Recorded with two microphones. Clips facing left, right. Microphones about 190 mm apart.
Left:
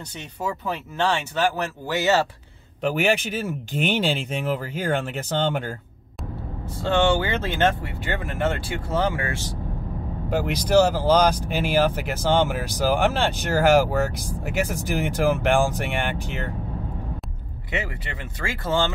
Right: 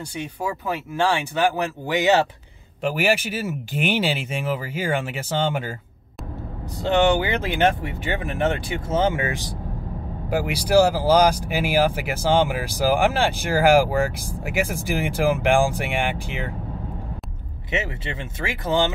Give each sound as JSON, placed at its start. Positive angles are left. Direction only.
{"t": 0.1, "sound": "speech", "side_deg": -10}
{"t": 6.8, "sound": "speech", "side_deg": -15}
{"t": 17.6, "sound": "speech", "side_deg": -20}